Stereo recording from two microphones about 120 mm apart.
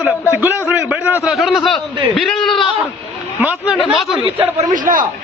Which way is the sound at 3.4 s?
15° right (ahead or behind).